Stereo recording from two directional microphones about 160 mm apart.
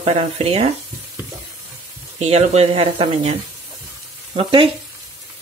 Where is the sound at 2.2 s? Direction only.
40° right (ahead or behind).